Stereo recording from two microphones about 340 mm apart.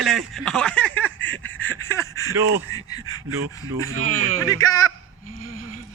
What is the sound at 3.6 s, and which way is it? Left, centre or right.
Speech, right.